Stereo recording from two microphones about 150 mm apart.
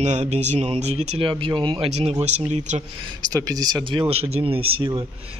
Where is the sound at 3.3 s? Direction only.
25° right (ahead or behind).